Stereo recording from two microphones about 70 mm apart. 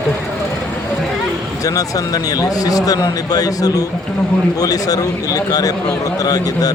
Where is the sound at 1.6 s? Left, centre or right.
Left.